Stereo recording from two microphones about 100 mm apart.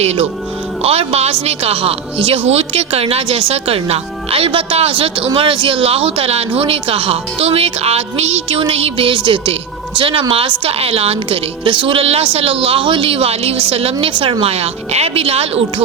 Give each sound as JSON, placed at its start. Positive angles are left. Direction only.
{"t": 0.0, "sound": "a woman's voice", "side_deg": -90}